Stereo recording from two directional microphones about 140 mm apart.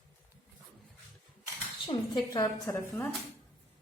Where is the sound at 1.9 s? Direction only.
30° left (ahead or behind).